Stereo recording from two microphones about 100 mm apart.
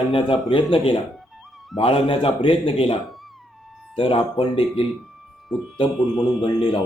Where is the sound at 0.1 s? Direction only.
60° left (ahead or behind).